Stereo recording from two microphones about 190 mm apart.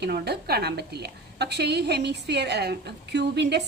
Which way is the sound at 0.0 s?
55° right (ahead or behind).